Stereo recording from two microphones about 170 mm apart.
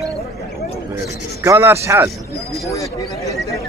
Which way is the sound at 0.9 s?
15° right (ahead or behind).